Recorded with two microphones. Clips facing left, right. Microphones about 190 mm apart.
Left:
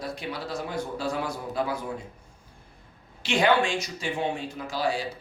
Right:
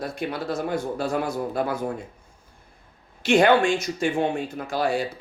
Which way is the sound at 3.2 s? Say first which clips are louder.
Right 5 dB; 50° right (ahead or behind).